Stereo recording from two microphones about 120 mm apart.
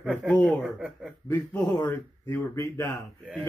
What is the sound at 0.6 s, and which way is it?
Speech, 10° right (ahead or behind).